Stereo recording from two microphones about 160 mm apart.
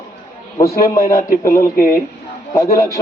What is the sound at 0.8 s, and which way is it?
A man's voice, 60° left (ahead or behind).